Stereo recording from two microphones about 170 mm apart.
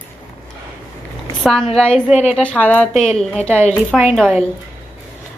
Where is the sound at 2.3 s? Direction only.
5° left (ahead or behind).